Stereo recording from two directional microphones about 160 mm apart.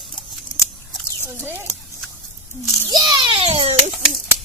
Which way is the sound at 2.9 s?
25° right (ahead or behind).